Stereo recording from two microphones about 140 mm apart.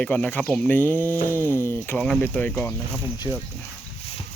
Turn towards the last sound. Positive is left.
turn(degrees=30)  # may be behind; listen again after turning